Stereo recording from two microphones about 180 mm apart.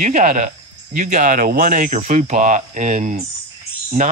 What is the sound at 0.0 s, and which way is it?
Speech, 45° right (ahead or behind).